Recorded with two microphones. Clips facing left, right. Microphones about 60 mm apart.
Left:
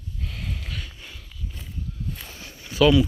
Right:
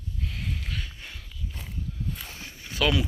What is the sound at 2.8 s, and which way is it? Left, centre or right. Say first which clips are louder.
Speech: left 8 dB; right.